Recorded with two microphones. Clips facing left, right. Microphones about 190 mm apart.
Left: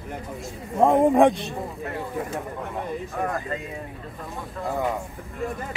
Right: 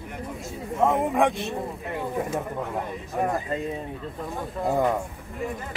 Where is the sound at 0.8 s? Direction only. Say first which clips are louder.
Left 5 dB; 30° left (ahead or behind).